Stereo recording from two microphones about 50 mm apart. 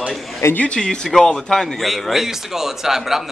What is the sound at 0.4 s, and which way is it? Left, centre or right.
Speech, left.